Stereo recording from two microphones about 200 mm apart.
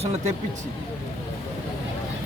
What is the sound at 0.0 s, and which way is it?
Speech, 30° right (ahead or behind).